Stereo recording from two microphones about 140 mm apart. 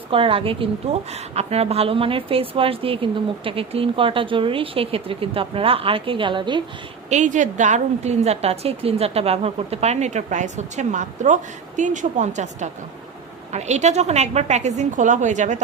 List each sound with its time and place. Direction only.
0.1 s a woman's voice: 40° right (ahead or behind)
7.1 s a woman's voice: 60° right (ahead or behind)